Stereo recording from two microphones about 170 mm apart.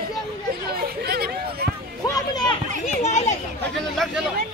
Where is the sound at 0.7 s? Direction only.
65° right (ahead or behind).